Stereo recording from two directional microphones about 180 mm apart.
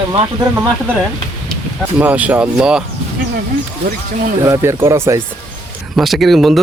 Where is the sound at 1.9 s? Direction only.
10° right (ahead or behind).